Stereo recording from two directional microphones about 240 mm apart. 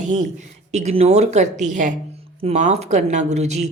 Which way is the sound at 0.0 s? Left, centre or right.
Right.